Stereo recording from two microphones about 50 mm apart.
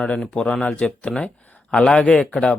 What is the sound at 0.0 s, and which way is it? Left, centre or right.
Speech, centre.